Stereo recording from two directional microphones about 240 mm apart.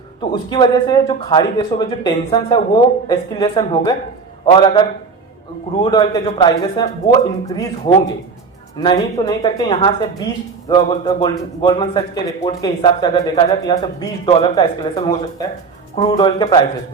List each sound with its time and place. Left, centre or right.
0.2 s a man's voice: centre